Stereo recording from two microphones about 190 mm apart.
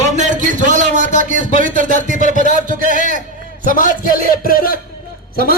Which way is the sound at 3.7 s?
45° left (ahead or behind).